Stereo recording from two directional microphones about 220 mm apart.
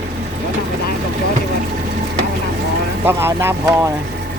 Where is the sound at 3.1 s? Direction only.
10° right (ahead or behind).